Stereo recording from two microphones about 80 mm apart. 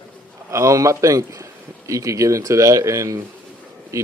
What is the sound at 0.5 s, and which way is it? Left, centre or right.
A man's voice, right.